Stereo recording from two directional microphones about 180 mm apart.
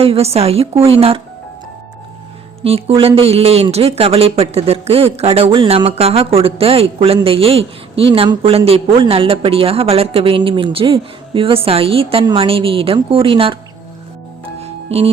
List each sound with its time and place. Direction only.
0.0 s speech: 35° right (ahead or behind)
2.6 s speech: 35° right (ahead or behind)
14.6 s music: 35° right (ahead or behind)